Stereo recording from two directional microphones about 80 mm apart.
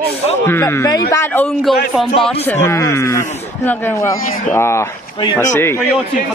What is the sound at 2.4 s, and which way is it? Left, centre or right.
Speech, left.